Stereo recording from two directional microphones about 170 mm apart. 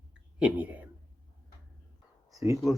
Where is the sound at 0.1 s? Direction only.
5° right (ahead or behind).